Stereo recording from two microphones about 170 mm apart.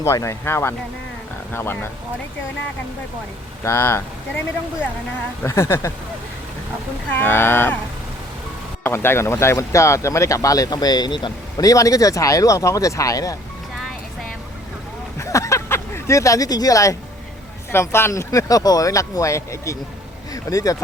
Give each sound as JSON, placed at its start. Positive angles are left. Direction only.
{"t": 0.0, "sound": "speech", "side_deg": 15}
{"t": 3.6, "sound": "speech", "side_deg": 15}
{"t": 5.4, "sound": "speech", "side_deg": 15}
{"t": 7.1, "sound": "speech", "side_deg": 10}
{"t": 8.8, "sound": "speech", "side_deg": 15}
{"t": 15.2, "sound": "a sound", "side_deg": 20}
{"t": 17.7, "sound": "speech", "side_deg": 15}